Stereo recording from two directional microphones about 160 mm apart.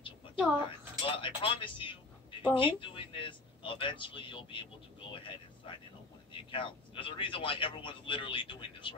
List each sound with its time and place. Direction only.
1.0 s speech: 35° left (ahead or behind)